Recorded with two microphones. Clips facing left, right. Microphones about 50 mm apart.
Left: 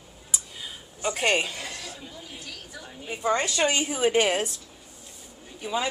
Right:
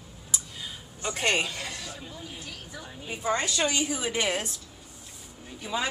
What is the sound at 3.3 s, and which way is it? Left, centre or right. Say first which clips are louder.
A woman's voice: left 3 dB; left.